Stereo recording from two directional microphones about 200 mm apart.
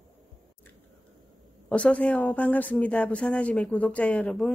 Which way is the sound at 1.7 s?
5° left (ahead or behind).